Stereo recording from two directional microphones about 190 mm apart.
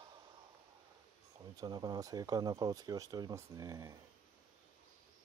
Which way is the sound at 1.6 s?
20° right (ahead or behind).